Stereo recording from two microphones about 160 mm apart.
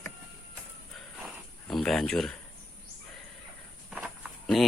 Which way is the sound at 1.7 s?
5° left (ahead or behind).